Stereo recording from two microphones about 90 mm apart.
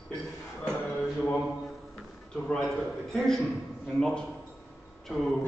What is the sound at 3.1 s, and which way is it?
Speech, 5° left (ahead or behind).